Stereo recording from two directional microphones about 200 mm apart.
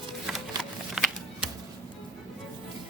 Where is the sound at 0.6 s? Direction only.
Centre (ahead or behind).